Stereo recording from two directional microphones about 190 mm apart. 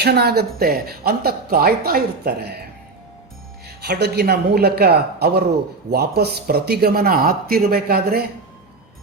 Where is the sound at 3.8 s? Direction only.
60° right (ahead or behind).